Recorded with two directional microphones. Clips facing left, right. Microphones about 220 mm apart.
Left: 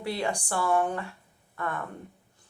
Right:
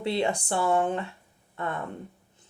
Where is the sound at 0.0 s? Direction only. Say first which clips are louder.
Right 4 dB; 25° right (ahead or behind).